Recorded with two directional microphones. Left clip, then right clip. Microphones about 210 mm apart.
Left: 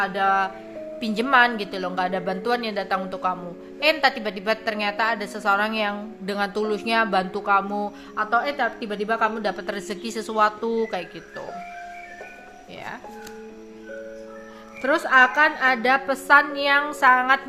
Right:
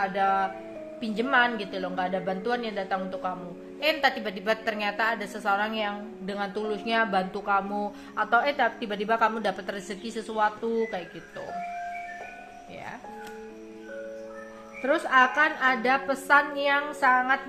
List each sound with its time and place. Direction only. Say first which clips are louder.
0.0 s a woman's voice: left 4 dB; 25° left (ahead or behind)
14.8 s a woman's voice: left 4 dB; 20° left (ahead or behind)